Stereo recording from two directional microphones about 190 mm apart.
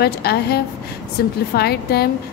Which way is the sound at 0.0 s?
55° left (ahead or behind).